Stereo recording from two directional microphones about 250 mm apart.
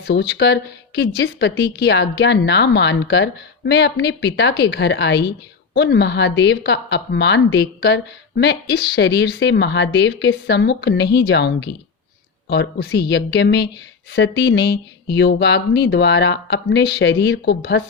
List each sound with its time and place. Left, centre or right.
0.0 s speech: left